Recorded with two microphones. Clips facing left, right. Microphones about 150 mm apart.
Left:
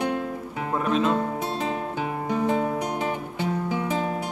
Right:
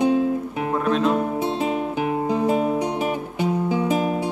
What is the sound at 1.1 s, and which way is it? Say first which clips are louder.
Music: right 4 dB; 15° right (ahead or behind).